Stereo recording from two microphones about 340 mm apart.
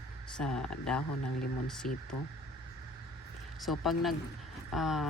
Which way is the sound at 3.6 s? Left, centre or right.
Centre.